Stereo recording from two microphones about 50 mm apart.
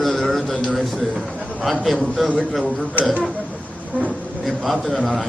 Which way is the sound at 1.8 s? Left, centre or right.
Centre.